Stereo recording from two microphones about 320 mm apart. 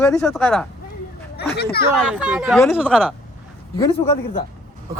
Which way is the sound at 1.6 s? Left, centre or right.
Left.